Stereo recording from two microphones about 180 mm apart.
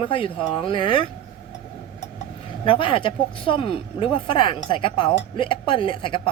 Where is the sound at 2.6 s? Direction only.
30° left (ahead or behind).